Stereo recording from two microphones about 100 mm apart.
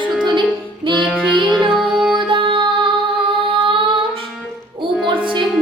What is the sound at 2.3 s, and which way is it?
Music, 55° right (ahead or behind).